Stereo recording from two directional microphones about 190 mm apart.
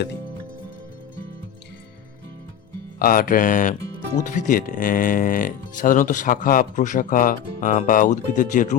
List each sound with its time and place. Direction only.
3.0 s speech: 50° left (ahead or behind)